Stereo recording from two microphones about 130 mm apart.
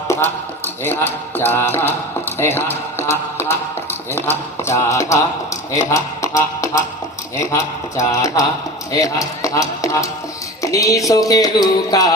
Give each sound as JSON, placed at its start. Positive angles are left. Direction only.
{"t": 0.1, "sound": "music", "side_deg": 15}
{"t": 5.7, "sound": "speech", "side_deg": 25}
{"t": 7.3, "sound": "music", "side_deg": 25}